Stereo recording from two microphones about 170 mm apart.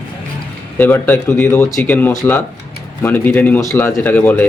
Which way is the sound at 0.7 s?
10° left (ahead or behind).